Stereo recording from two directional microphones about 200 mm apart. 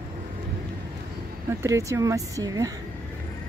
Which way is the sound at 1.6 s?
15° right (ahead or behind).